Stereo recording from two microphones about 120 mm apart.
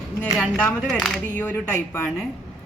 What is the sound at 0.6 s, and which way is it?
A woman's voice, 10° left (ahead or behind).